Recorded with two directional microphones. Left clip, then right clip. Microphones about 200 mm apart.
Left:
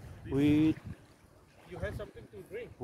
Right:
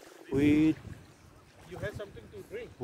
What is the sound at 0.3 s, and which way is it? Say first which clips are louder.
Boat: right 2 dB; 5° right (ahead or behind).